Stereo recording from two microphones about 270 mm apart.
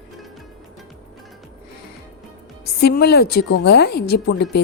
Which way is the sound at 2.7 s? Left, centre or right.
Left.